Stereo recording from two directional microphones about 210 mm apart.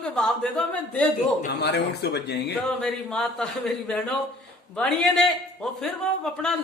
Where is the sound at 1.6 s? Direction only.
50° left (ahead or behind).